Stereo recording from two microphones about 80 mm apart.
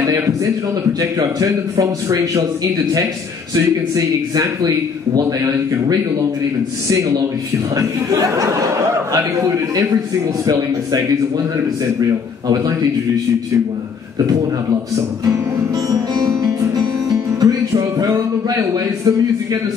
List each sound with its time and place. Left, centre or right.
1.2 s a man's voice: right
7.7 s a man's voice: right
15.9 s music: right
18.1 s a man's voice: right